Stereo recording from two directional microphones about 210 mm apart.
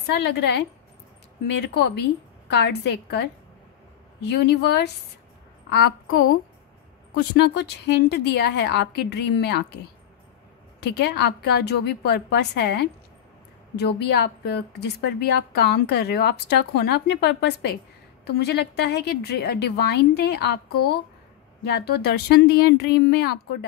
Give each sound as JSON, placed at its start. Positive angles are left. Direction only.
{"t": 0.0, "sound": "a woman's voice", "side_deg": 50}
{"t": 7.5, "sound": "a woman's voice", "side_deg": 55}
{"t": 10.8, "sound": "a woman's voice", "side_deg": 55}
{"t": 21.6, "sound": "a woman's voice", "side_deg": 50}